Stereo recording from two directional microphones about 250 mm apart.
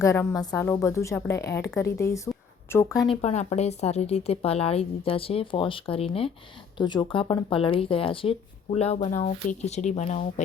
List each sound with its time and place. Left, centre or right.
0.0 s a woman's voice: centre
2.3 s a sound: centre
3.1 s speech: left